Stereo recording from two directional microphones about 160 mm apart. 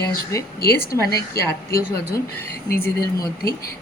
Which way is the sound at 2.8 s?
20° left (ahead or behind).